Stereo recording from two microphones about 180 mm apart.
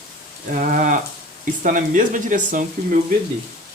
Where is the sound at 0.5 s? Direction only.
45° right (ahead or behind).